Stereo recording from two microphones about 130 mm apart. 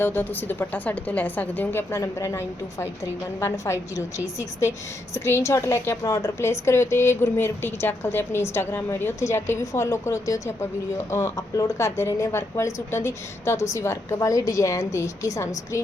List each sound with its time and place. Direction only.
0.0 s a woman's voice: 15° left (ahead or behind)